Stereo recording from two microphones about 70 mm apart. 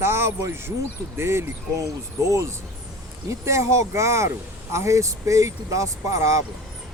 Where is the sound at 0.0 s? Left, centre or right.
Right.